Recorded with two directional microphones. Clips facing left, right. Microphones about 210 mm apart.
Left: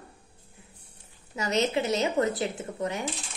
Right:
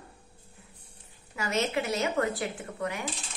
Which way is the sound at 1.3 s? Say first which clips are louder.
Left 3 dB; 20° left (ahead or behind).